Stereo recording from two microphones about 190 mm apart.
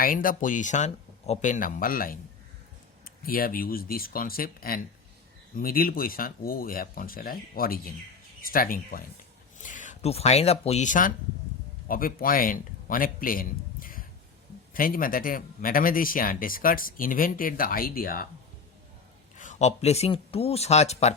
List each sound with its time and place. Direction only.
0.0 s a man's voice: 45° left (ahead or behind)
19.4 s speech: 40° left (ahead or behind)